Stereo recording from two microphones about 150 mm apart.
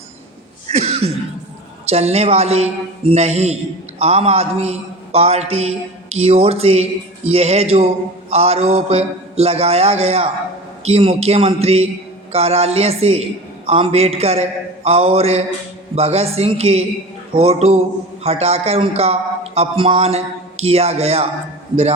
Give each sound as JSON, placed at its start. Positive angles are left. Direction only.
{"t": 0.7, "sound": "cough", "side_deg": -45}
{"t": 1.9, "sound": "a man's voice", "side_deg": -45}